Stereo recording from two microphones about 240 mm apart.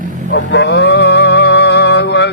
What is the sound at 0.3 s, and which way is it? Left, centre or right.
Music, left.